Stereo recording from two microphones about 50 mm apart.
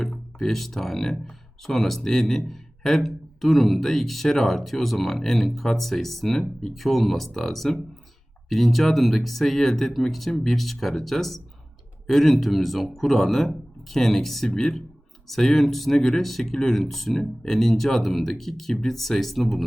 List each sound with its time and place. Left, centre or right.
0.0 s speech: centre